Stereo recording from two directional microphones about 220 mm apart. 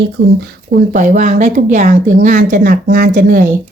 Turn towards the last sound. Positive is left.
turn(degrees=-40)  # may be behind; listen again after turning